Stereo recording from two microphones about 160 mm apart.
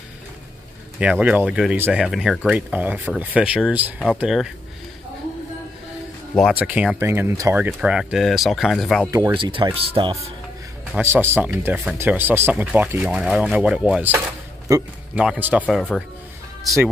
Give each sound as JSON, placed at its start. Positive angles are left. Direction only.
{"t": 0.9, "sound": "speech", "side_deg": -10}
{"t": 6.5, "sound": "speech", "side_deg": -10}
{"t": 9.3, "sound": "speech", "side_deg": -30}
{"t": 11.0, "sound": "speech", "side_deg": -15}
{"t": 14.7, "sound": "speech", "side_deg": -25}
{"t": 15.1, "sound": "speech", "side_deg": -10}
{"t": 15.6, "sound": "speech", "side_deg": 5}